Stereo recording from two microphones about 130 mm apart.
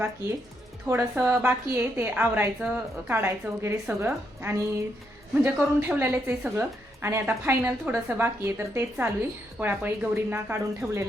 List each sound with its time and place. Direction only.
0.9 s a woman's voice: 20° right (ahead or behind)